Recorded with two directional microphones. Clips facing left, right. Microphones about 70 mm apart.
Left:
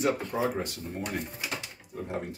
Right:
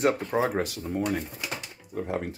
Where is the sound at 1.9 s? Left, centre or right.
Right.